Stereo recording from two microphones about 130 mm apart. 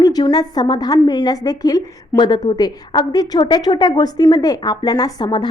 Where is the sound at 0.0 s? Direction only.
30° left (ahead or behind).